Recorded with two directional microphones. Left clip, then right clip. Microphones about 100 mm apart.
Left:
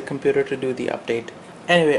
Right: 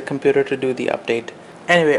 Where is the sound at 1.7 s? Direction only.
5° right (ahead or behind).